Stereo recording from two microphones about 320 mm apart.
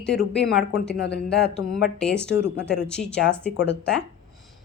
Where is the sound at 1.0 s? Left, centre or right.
Left.